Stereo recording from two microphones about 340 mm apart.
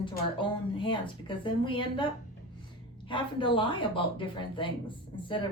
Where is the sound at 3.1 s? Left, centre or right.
Centre.